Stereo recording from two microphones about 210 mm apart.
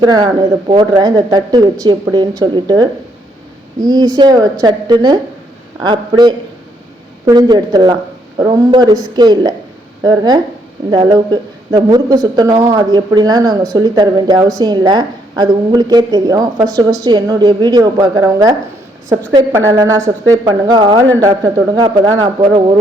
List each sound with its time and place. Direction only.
0.0 s a woman's voice: 20° right (ahead or behind)